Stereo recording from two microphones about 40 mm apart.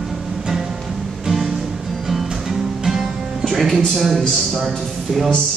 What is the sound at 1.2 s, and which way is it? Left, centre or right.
Music, centre.